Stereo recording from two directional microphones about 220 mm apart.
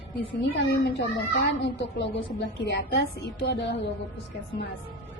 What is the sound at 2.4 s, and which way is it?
A woman's voice, 50° left (ahead or behind).